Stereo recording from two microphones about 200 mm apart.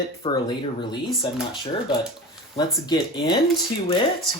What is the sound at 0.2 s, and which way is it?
Speech, 25° left (ahead or behind).